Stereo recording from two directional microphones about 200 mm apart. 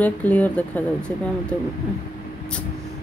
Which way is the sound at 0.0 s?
5° left (ahead or behind).